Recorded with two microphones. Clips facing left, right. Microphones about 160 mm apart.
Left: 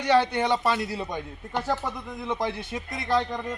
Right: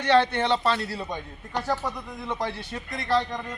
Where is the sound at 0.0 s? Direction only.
15° left (ahead or behind).